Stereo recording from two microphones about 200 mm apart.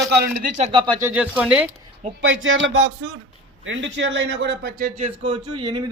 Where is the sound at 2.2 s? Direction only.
70° right (ahead or behind).